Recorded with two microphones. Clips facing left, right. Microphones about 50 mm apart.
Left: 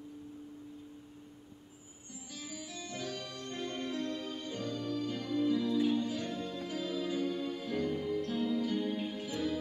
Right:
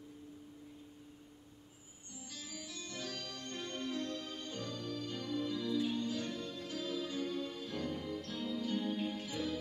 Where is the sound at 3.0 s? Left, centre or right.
Centre.